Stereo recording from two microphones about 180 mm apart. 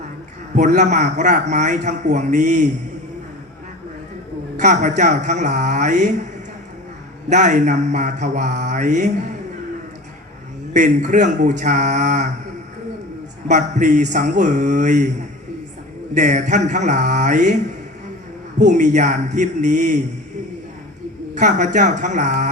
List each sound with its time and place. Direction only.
0.5 s a man's voice: 45° right (ahead or behind)
4.5 s mantra: 40° right (ahead or behind)
7.3 s mantra: 40° right (ahead or behind)
10.8 s a man's voice: 45° right (ahead or behind)
13.5 s a man's voice: 45° right (ahead or behind)
16.1 s a man's voice: 45° right (ahead or behind)
18.6 s mantra: 40° right (ahead or behind)
21.3 s a man's voice: 40° right (ahead or behind)